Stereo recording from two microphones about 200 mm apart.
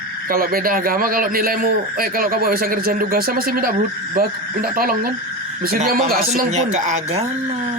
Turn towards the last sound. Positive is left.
turn(degrees=-35)  # may be behind; listen again after turning